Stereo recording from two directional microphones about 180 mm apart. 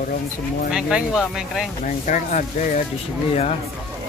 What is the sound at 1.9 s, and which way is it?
Speech, 45° left (ahead or behind).